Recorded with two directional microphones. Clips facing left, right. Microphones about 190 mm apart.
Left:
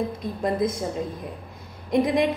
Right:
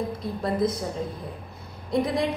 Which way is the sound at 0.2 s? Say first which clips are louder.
Even; 20° left (ahead or behind).